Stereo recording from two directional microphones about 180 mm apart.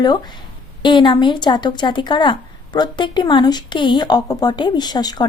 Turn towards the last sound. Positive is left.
turn(degrees=20)  # may be behind; listen again after turning